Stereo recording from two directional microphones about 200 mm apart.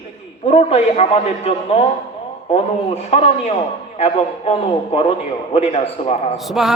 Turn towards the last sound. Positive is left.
turn(degrees=0)  # may be behind; listen again after turning